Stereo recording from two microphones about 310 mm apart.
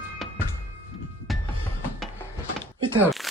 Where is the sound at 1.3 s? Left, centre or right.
Centre.